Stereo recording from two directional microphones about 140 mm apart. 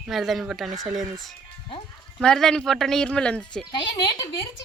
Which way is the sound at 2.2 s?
5° left (ahead or behind).